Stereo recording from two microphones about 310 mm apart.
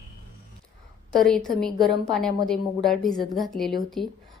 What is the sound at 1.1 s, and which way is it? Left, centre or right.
Speech, centre.